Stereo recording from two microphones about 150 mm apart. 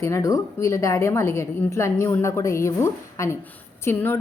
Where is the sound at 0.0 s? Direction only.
20° left (ahead or behind).